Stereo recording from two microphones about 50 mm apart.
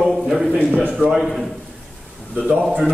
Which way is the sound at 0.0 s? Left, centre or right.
Centre.